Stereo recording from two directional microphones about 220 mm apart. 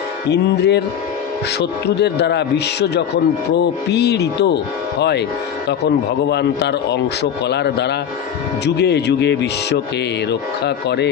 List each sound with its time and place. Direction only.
0.3 s a man's voice: 50° left (ahead or behind)
6.2 s a man's voice: 50° left (ahead or behind)